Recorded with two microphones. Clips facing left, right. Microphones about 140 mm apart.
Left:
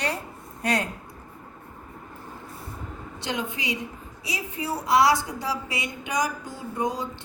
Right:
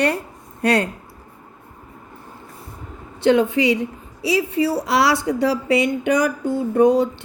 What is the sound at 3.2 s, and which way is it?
A woman's voice, 60° right (ahead or behind).